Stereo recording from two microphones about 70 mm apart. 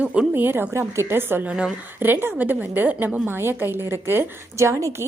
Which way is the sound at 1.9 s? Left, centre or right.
Right.